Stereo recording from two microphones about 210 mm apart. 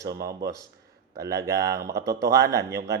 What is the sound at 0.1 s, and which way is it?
Speech, 45° right (ahead or behind).